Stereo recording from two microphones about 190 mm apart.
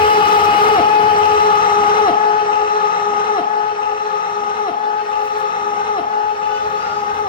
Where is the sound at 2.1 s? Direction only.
25° left (ahead or behind).